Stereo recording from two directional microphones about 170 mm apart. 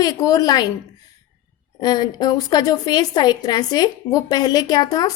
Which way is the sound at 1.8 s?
25° left (ahead or behind).